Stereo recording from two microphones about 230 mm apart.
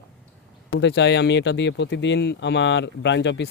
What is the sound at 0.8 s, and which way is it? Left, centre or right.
Speech, left.